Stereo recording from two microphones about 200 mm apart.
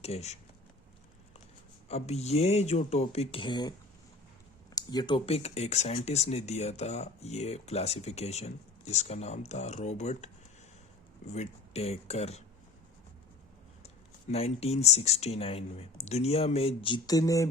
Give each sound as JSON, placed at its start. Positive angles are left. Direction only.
{"t": 0.0, "sound": "speech", "side_deg": 30}
{"t": 1.9, "sound": "speech", "side_deg": 30}
{"t": 11.3, "sound": "speech", "side_deg": 35}
{"t": 13.8, "sound": "speech", "side_deg": 30}